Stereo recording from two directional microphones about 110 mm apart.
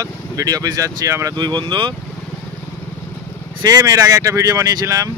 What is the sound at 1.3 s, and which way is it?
Speech, 45° right (ahead or behind).